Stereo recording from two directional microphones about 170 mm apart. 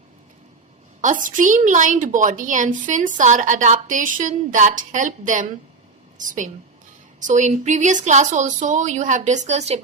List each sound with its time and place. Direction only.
1.0 s speech: 50° right (ahead or behind)